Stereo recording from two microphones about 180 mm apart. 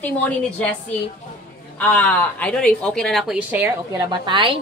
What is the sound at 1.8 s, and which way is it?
A woman's voice, 10° left (ahead or behind).